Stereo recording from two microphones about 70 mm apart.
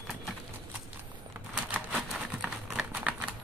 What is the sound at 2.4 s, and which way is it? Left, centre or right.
Crumpling, centre.